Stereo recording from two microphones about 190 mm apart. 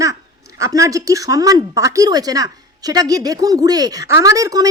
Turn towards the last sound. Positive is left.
turn(degrees=-20)  # may be behind; listen again after turning